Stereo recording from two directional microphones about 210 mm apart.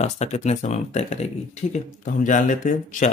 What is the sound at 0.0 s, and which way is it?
Speech, 35° left (ahead or behind).